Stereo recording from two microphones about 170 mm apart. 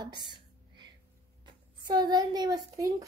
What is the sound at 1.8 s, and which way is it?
A woman's voice, 25° right (ahead or behind).